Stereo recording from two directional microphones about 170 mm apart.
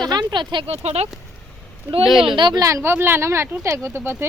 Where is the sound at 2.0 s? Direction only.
Centre (ahead or behind).